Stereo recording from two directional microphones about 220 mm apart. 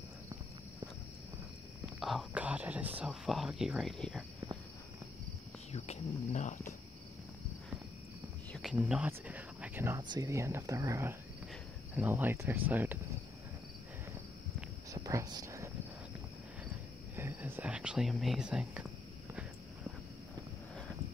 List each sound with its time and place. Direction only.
2.0 s speech: centre (ahead or behind)
5.7 s speech: 30° left (ahead or behind)
8.5 s speech: 5° right (ahead or behind)
15.0 s a sound: 15° right (ahead or behind)
17.1 s speech: 10° right (ahead or behind)